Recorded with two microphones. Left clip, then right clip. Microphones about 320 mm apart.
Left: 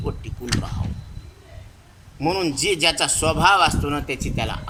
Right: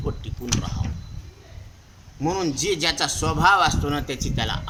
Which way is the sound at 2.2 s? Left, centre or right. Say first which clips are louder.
Left 2 dB; centre.